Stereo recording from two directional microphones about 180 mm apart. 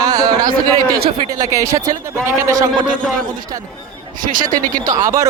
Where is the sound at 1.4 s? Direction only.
15° right (ahead or behind).